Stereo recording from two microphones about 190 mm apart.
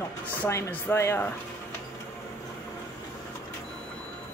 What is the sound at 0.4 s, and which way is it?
Speech, 10° left (ahead or behind).